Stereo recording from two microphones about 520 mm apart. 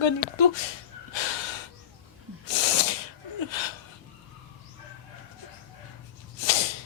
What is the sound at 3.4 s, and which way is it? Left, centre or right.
Speech, left.